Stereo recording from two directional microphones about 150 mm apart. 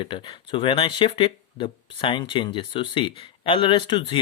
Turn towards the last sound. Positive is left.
turn(degrees=30)  # may be behind; listen again after turning